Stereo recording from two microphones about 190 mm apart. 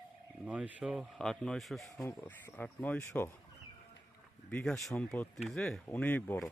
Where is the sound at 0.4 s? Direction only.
5° right (ahead or behind); by 3.3 s 10° left (ahead or behind).